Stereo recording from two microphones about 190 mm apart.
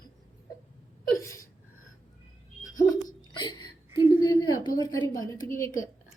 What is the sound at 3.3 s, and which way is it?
A woman's voice, 25° left (ahead or behind).